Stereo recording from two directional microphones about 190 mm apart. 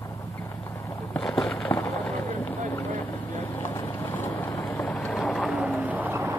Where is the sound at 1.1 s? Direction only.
5° left (ahead or behind).